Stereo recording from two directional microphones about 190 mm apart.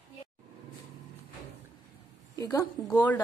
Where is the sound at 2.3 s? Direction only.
15° left (ahead or behind).